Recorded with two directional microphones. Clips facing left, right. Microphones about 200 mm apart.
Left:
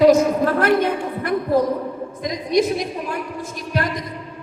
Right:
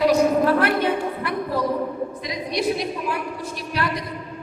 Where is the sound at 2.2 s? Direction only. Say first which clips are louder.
Left 10 dB; 45° left (ahead or behind).